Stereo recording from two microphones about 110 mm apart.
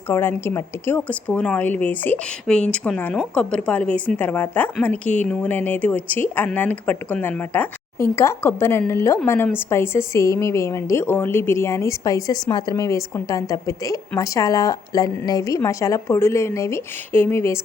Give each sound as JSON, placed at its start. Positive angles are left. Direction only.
{"t": 0.1, "sound": "a woman's voice", "side_deg": 20}